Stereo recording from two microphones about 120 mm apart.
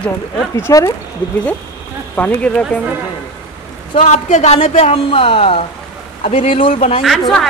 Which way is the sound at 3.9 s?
80° left.